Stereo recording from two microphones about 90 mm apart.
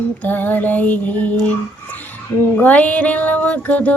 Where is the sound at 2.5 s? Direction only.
15° left (ahead or behind).